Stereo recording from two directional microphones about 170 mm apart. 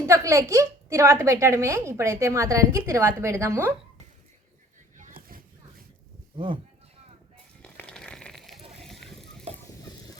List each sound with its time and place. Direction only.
0.0 s a woman's voice: 15° right (ahead or behind)
6.3 s speech: 30° right (ahead or behind)
7.6 s fire: 5° left (ahead or behind)